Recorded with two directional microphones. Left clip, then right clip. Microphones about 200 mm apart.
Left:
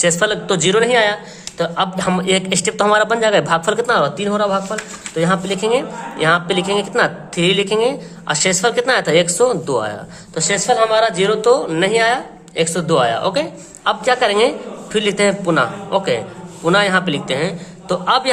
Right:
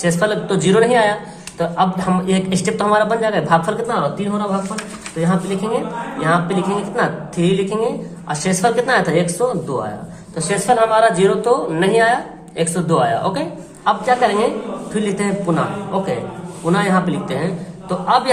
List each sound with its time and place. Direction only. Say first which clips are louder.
0.0 s a man's voice: left 2 dB; 40° left (ahead or behind)
10.3 s speech: even; 30° left (ahead or behind)
13.8 s a man's voice: even; 40° left (ahead or behind)